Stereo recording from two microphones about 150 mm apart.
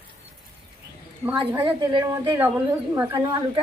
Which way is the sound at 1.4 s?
15° right (ahead or behind).